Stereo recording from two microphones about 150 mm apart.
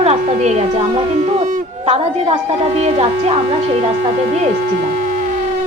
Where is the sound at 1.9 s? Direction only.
40° right (ahead or behind).